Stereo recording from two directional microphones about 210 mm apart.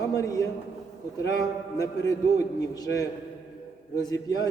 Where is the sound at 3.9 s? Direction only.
15° left (ahead or behind).